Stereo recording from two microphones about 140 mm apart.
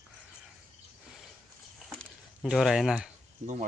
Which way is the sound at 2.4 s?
Centre (ahead or behind).